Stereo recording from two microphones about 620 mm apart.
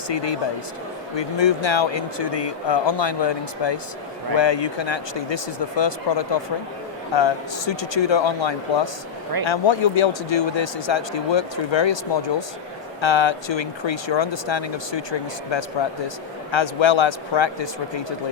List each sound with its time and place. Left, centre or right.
0.1 s speech: left